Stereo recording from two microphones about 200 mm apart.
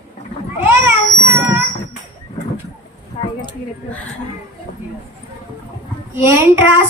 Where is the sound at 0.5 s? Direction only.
10° right (ahead or behind).